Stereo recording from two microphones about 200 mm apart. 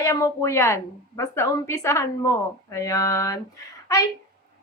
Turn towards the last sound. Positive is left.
turn(degrees=15)  # may be behind; listen again after turning